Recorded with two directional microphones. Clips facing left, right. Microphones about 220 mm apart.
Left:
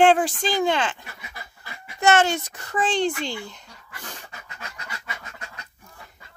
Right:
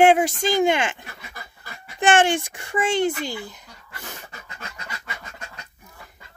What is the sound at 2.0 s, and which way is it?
Speech, 30° right (ahead or behind).